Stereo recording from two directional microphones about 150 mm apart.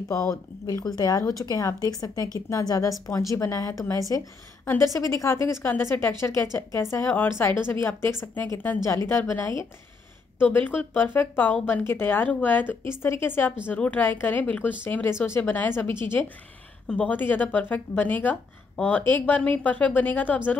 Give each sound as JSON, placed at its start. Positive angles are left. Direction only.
{"t": 0.7, "sound": "a woman's voice", "side_deg": 25}
{"t": 10.4, "sound": "speech", "side_deg": 15}